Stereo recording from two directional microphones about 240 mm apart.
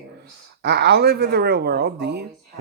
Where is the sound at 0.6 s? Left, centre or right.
Right.